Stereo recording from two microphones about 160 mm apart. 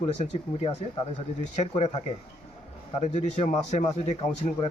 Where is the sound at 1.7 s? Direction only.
35° left (ahead or behind).